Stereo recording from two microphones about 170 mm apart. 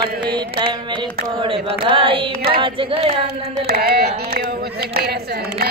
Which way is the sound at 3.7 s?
65° right (ahead or behind).